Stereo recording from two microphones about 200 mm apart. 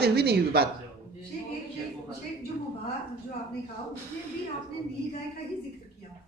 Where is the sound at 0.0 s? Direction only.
50° right (ahead or behind).